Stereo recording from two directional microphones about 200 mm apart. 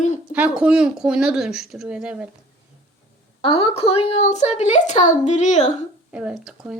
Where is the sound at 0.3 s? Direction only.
5° right (ahead or behind).